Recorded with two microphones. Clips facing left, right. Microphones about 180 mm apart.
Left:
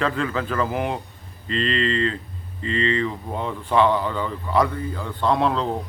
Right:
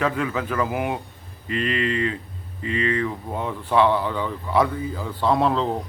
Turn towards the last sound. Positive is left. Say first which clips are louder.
# right 1 dB
turn(degrees=0)  # may be behind; listen again after turning